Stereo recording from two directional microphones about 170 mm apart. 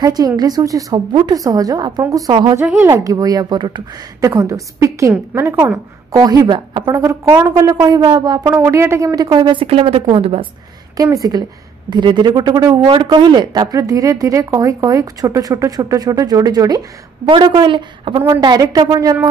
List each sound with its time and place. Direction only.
0.0 s speech: 20° right (ahead or behind)
2.6 s a woman's voice: 10° right (ahead or behind); by 7.0 s 25° right (ahead or behind)
7.0 s a woman's voice: 15° right (ahead or behind); by 10.5 s 30° right (ahead or behind)
11.0 s speech: 20° right (ahead or behind)